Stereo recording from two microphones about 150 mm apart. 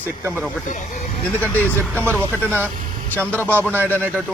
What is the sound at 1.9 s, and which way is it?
Speech, 15° right (ahead or behind).